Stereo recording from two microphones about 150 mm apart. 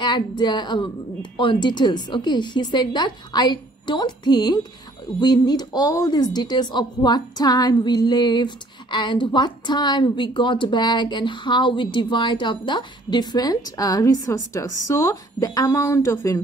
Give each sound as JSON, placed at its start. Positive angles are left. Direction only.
{"t": 0.0, "sound": "speech", "side_deg": 30}